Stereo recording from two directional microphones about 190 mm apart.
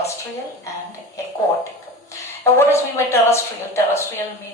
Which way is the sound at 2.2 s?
15° left (ahead or behind).